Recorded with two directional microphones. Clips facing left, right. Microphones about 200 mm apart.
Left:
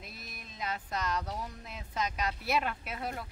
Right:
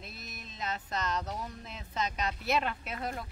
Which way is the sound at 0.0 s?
10° left (ahead or behind).